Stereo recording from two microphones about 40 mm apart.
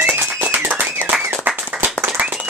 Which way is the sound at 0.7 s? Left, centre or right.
Right.